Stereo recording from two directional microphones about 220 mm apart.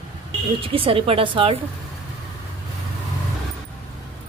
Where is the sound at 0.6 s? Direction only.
25° right (ahead or behind).